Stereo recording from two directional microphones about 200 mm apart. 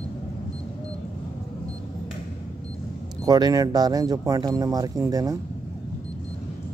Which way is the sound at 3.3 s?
20° right (ahead or behind).